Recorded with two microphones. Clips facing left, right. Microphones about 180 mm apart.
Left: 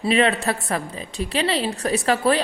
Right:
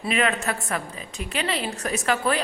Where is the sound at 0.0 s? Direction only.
30° left (ahead or behind).